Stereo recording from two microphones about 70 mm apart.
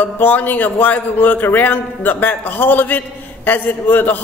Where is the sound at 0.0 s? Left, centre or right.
Left.